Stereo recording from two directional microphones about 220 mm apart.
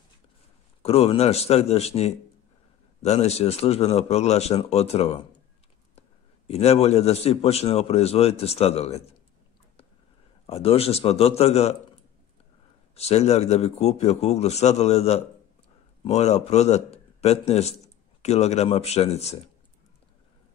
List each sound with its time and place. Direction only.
0.8 s a man's voice: 25° left (ahead or behind)
10.4 s a man's voice: 25° left (ahead or behind)
12.9 s a man's voice: 30° left (ahead or behind)